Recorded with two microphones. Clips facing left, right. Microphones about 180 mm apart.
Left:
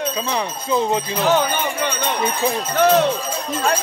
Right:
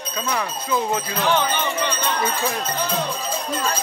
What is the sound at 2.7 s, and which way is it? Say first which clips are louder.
Speech: left 10 dB; 75° left (ahead or behind).